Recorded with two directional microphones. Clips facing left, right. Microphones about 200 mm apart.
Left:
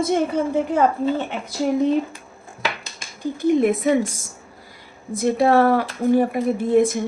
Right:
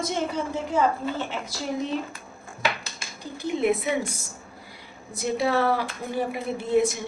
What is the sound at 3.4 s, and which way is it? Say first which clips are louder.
Speech: left 6 dB; 50° left (ahead or behind).